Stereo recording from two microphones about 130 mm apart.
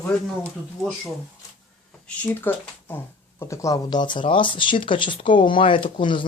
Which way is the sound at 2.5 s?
15° left (ahead or behind).